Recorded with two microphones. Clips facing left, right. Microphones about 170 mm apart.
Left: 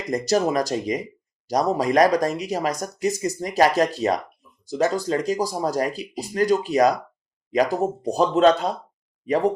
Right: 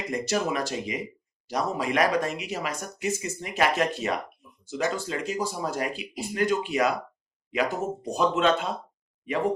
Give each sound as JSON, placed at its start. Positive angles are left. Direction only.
{"t": 0.1, "sound": "speech", "side_deg": 40}